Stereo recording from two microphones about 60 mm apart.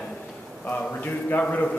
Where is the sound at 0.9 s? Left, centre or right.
Left.